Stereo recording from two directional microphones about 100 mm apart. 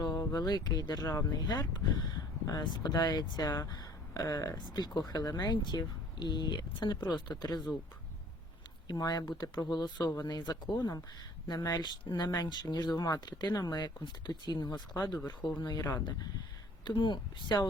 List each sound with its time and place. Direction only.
0.0 s speech: 35° left (ahead or behind)
8.9 s speech: 40° left (ahead or behind)
16.8 s speech: 50° left (ahead or behind)